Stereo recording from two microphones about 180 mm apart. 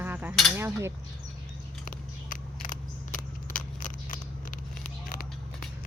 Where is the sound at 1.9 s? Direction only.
50° left (ahead or behind).